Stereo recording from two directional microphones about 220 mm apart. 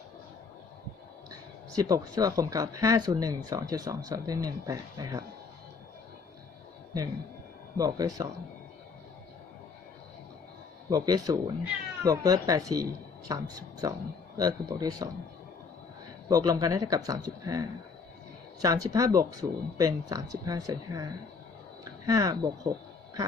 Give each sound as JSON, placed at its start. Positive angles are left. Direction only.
{"t": 1.3, "sound": "speech", "side_deg": -15}
{"t": 7.8, "sound": "speech", "side_deg": -15}
{"t": 10.8, "sound": "speech", "side_deg": -15}
{"t": 16.3, "sound": "speech", "side_deg": -15}
{"t": 18.6, "sound": "speech", "side_deg": -15}